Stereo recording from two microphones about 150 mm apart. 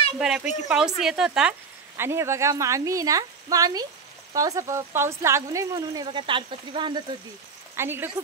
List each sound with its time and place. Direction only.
0.2 s a woman's voice: 5° right (ahead or behind)
2.0 s speech: 15° right (ahead or behind)
7.7 s a woman's voice: 15° right (ahead or behind)